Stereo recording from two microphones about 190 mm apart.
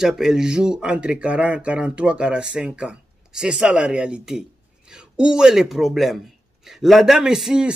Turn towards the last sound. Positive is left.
turn(degrees=-5)  # may be behind; listen again after turning